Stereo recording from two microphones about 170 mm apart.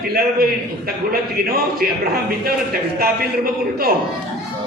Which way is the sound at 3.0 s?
60° right (ahead or behind).